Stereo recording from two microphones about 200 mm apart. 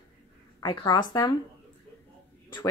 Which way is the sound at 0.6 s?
20° left (ahead or behind).